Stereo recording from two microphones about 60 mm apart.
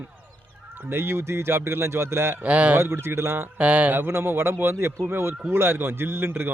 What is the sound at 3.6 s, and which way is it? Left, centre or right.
A man's voice, right.